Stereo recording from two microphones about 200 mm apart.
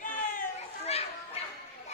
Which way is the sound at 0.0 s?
40° left (ahead or behind).